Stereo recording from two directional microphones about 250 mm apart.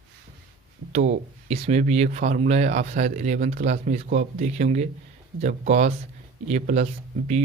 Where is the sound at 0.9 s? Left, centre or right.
Right.